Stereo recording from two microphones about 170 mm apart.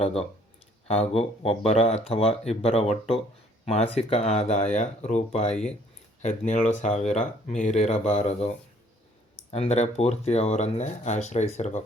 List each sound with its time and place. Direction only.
0.0 s speech: 35° left (ahead or behind)